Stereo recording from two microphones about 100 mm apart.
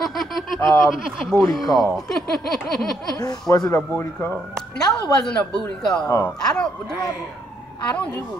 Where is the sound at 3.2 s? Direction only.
40° left (ahead or behind).